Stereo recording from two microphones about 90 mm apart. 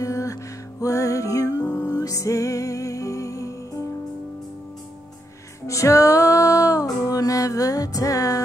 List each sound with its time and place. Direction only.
0.0 s music: 40° left (ahead or behind)
5.7 s female singing: 35° left (ahead or behind)